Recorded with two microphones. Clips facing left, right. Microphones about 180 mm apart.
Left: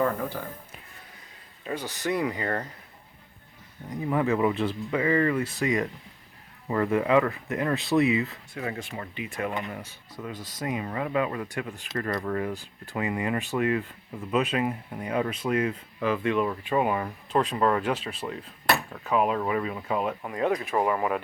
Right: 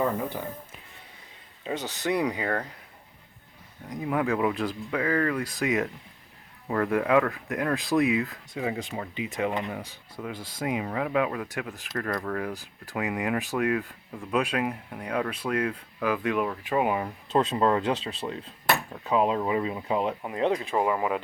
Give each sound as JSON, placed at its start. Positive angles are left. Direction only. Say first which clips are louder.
{"t": 1.6, "sound": "speech", "louder": "right 1 dB", "side_deg": -20}
{"t": 3.8, "sound": "speech", "louder": "left 1 dB", "side_deg": 0}
{"t": 8.5, "sound": "speech", "louder": "right 3 dB", "side_deg": -15}
{"t": 16.0, "sound": "speech", "louder": "left 1 dB", "side_deg": -10}
{"t": 17.3, "sound": "speech", "louder": "right 1 dB", "side_deg": -25}
{"t": 20.7, "sound": "speech", "louder": "even", "side_deg": -15}